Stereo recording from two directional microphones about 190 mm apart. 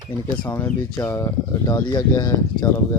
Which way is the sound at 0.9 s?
20° left (ahead or behind).